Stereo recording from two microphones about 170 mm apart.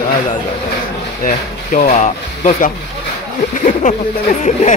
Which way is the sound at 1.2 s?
50° left (ahead or behind).